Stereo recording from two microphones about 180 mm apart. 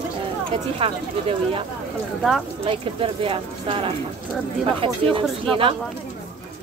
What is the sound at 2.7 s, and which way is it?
Speech, 30° right (ahead or behind).